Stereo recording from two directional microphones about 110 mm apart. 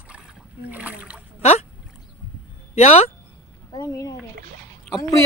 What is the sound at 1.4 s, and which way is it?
Speech, 70° left (ahead or behind).